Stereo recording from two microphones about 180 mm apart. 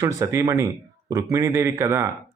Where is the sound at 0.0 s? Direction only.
15° right (ahead or behind).